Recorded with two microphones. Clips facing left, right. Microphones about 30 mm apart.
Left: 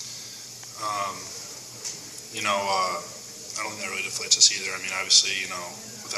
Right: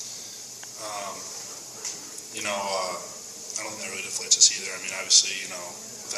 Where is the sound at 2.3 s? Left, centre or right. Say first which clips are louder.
Left 4 dB; left.